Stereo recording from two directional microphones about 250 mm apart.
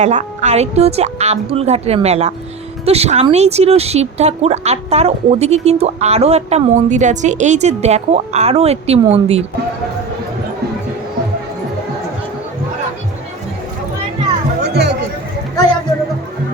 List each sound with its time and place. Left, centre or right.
0.0 s speech: right
14.6 s music: right